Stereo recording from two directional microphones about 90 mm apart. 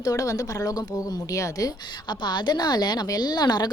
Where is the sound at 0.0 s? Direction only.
40° left (ahead or behind).